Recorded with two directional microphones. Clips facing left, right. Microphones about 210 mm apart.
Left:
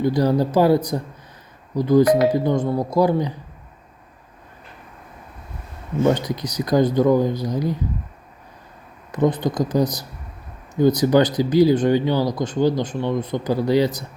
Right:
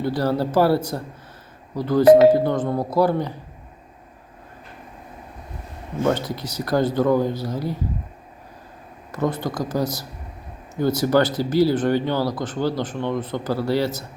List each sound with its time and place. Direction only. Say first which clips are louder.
0.0 s speech: left 3 dB; 15° left (ahead or behind)
6.1 s speech: left 1 dB; 15° left (ahead or behind)
9.1 s speech: left 4 dB; 15° left (ahead or behind)